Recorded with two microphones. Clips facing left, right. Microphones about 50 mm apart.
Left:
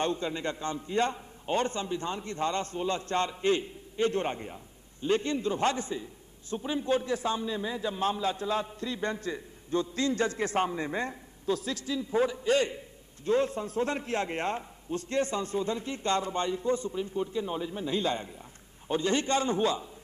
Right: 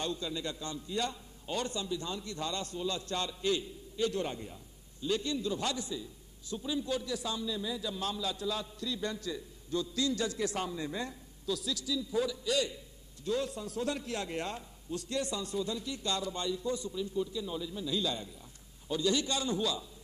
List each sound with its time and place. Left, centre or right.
0.0 s a man's voice: left